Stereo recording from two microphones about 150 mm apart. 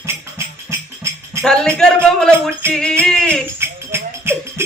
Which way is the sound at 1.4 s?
5° left (ahead or behind).